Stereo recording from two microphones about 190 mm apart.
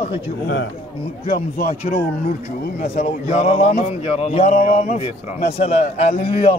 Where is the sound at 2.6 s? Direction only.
40° left (ahead or behind).